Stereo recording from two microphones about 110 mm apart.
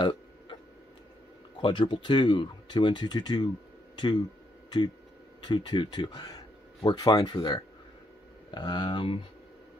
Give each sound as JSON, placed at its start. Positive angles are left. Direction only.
{"t": 0.0, "sound": "burping", "side_deg": 45}
{"t": 1.6, "sound": "speech", "side_deg": 45}
{"t": 3.9, "sound": "a sound", "side_deg": 45}
{"t": 5.4, "sound": "speech", "side_deg": 40}